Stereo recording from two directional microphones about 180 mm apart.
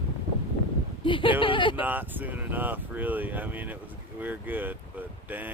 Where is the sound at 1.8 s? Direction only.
10° right (ahead or behind).